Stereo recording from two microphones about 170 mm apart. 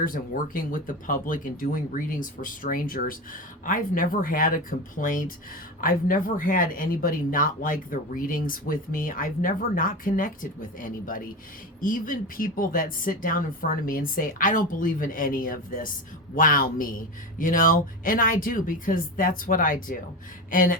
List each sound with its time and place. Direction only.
0.0 s speech: 55° left (ahead or behind)